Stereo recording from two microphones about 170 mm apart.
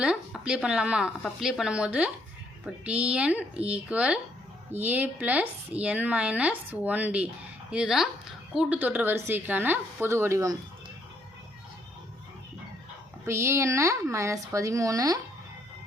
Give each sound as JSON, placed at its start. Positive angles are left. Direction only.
{"t": 0.0, "sound": "speech", "side_deg": -5}
{"t": 13.2, "sound": "speech", "side_deg": -15}